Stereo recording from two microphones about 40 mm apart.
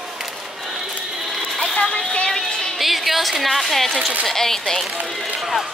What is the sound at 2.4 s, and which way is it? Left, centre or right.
Music, centre.